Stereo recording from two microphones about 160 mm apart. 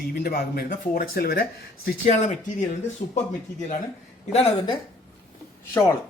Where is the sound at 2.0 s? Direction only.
45° left (ahead or behind).